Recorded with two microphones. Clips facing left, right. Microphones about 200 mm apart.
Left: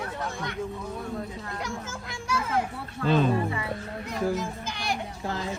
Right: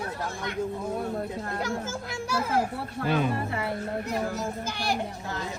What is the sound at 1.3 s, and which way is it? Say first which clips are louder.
Speech: right 4 dB; 55° right (ahead or behind).